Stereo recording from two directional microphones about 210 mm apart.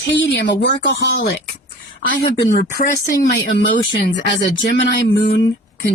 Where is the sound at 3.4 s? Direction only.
60° left (ahead or behind).